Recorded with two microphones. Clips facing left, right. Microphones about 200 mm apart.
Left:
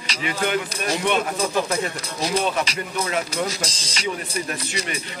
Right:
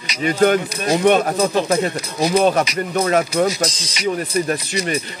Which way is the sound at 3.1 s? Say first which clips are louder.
Right 10 dB; 55° right (ahead or behind).